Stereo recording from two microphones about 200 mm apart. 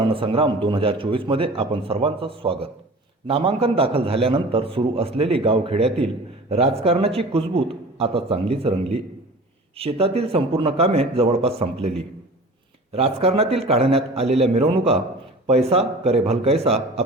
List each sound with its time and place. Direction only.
0.0 s a man's voice: 25° right (ahead or behind)
12.9 s a man's voice: 30° right (ahead or behind)